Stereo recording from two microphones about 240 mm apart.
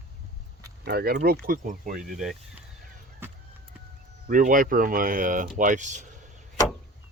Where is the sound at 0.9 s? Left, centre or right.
Right.